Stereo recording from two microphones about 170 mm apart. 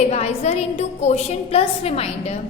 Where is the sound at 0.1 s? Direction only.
40° left (ahead or behind).